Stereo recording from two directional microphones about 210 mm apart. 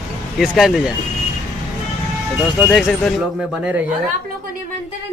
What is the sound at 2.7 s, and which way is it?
Speech, centre (ahead or behind).